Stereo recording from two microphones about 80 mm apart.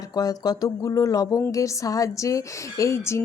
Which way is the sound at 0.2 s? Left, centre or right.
Left.